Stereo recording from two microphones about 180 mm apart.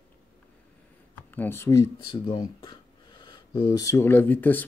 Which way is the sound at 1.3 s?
10° left (ahead or behind).